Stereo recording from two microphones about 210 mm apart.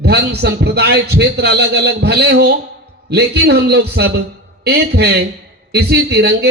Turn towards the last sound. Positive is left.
turn(degrees=-50)  # may be behind; listen again after turning